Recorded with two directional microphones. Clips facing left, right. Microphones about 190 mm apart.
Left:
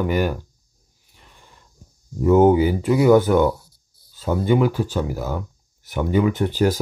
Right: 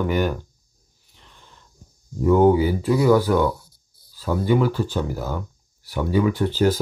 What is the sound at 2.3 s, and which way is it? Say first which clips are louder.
Speech: left 2 dB; 20° left (ahead or behind).